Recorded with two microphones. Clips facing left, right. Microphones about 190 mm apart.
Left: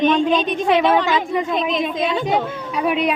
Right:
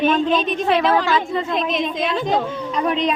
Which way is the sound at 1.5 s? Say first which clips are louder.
Left 1 dB; centre (ahead or behind).